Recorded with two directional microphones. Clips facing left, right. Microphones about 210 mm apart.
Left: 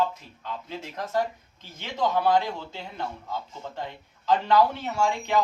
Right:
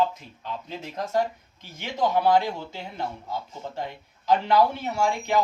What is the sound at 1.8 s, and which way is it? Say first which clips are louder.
Speech: right 2 dB; 15° right (ahead or behind).